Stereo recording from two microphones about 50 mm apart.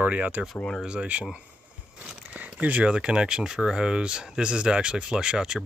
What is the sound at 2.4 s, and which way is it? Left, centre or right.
Speech, right.